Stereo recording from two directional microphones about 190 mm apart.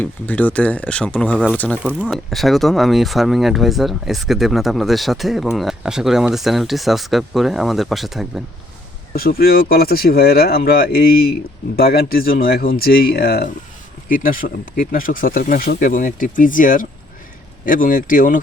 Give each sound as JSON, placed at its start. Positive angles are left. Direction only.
{"t": 0.0, "sound": "speech", "side_deg": 10}
{"t": 9.1, "sound": "speech", "side_deg": 50}